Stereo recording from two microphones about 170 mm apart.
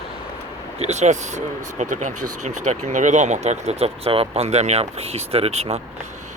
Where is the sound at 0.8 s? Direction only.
40° right (ahead or behind).